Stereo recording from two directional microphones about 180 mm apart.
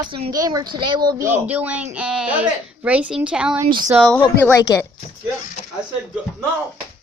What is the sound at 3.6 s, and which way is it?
Speech, 25° right (ahead or behind).